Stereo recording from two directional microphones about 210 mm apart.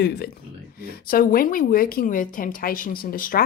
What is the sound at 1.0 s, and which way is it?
A woman's voice, 45° left (ahead or behind).